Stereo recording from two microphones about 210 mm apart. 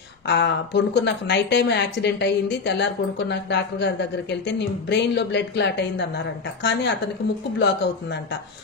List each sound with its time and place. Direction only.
0.3 s a woman's voice: 55° left (ahead or behind)